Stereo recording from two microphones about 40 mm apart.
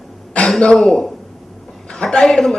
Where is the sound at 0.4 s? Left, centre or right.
Left.